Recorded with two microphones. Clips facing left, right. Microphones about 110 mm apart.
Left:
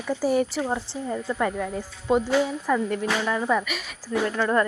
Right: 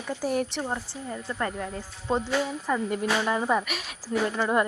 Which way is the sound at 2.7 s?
15° right (ahead or behind).